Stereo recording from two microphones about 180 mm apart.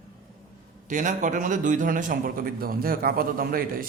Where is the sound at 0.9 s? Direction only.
45° right (ahead or behind).